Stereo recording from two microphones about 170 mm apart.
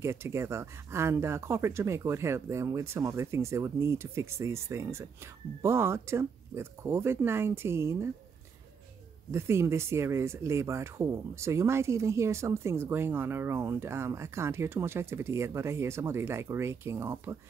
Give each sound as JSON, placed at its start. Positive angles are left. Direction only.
{"t": 0.0, "sound": "speech", "side_deg": -15}
{"t": 9.3, "sound": "speech", "side_deg": -15}